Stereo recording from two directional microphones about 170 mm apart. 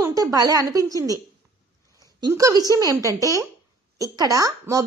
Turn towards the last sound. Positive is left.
turn(degrees=-20)  # may be behind; listen again after turning